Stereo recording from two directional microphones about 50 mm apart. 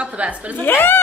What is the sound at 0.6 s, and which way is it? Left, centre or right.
Speech, left.